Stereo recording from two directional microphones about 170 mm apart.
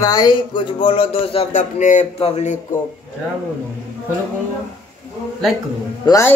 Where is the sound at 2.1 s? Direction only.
35° left (ahead or behind).